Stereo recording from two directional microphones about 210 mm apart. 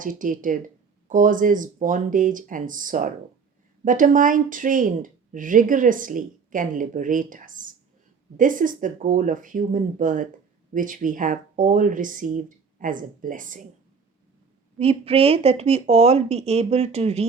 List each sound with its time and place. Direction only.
0.0 s speech: 40° right (ahead or behind)
14.8 s speech: 30° right (ahead or behind)